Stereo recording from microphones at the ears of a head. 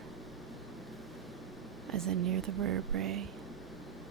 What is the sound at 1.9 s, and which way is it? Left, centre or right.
Speech, right.